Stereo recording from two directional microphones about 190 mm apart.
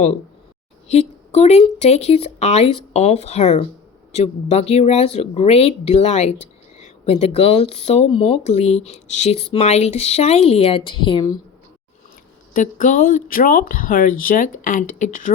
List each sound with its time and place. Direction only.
0.9 s speech: 35° left (ahead or behind)
12.5 s speech: 45° left (ahead or behind)